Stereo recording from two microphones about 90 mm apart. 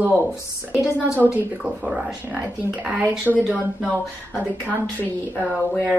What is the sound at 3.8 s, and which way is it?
A woman's voice, 15° left (ahead or behind).